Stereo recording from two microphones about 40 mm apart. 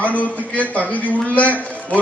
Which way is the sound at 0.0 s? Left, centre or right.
Left.